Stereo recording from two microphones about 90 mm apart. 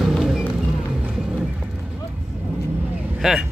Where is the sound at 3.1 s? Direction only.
5° right (ahead or behind).